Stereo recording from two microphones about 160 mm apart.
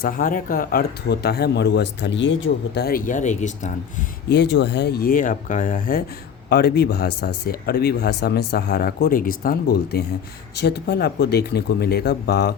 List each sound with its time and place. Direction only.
0.0 s speech: 60° left (ahead or behind); by 2.1 s 90° left
2.7 s speech: 70° left (ahead or behind); by 3.7 s 50° left (ahead or behind)
4.3 s speech: 90° left; by 6.0 s 60° left (ahead or behind)
6.5 s speech: 85° left
10.6 s speech: 90° left